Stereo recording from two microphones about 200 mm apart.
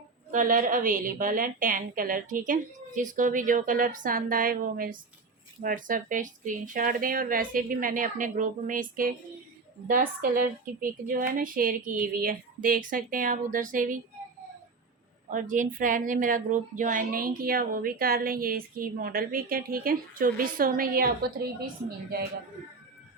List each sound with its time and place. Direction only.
0.3 s a woman's voice: 40° right (ahead or behind)
15.3 s a woman's voice: 40° right (ahead or behind)